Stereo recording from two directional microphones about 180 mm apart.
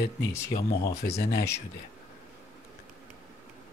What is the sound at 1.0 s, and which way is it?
Speech, 65° left (ahead or behind).